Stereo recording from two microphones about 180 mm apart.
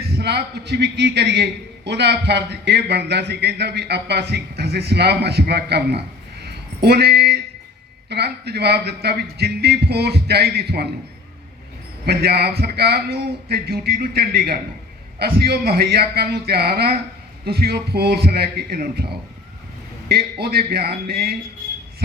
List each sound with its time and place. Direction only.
0.1 s a man's voice: 65° right (ahead or behind)
6.4 s a sound: 60° right (ahead or behind)
8.1 s a man's voice: 65° right (ahead or behind)
12.0 s a man's voice: 65° right (ahead or behind)
20.1 s a man's voice: 60° right (ahead or behind)